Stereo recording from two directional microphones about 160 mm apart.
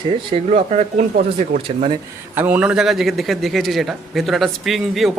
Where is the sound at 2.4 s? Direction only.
10° right (ahead or behind).